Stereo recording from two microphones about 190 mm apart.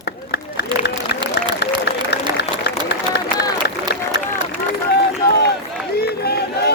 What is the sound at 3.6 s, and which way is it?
Run, 65° left (ahead or behind).